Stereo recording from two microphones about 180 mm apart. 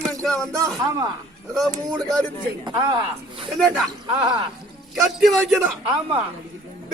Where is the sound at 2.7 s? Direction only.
25° right (ahead or behind).